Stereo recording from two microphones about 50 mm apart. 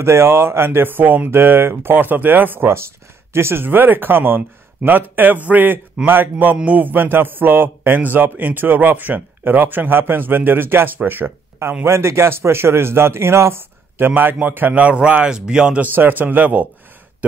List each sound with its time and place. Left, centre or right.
0.0 s speech: right
3.3 s a man's voice: right
3.6 s a man's voice: right
6.4 s a man's voice: right
11.8 s a man's voice: right
14.7 s a man's voice: right
15.8 s a man's voice: right
17.2 s throat clearing: right